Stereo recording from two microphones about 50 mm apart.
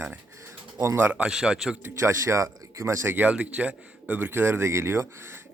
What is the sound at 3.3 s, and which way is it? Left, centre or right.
Speech, right.